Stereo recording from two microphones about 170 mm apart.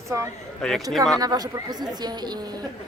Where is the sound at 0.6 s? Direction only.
5° left (ahead or behind).